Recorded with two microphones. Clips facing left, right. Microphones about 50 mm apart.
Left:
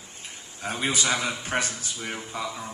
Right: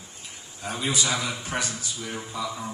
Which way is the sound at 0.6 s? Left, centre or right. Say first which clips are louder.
Left 1 dB; left.